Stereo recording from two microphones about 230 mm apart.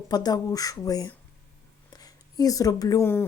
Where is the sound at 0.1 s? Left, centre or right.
Centre.